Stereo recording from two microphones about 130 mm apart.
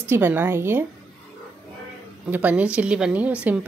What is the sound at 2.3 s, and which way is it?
A woman's voice, 10° right (ahead or behind).